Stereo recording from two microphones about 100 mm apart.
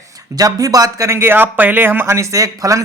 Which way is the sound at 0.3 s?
35° right (ahead or behind).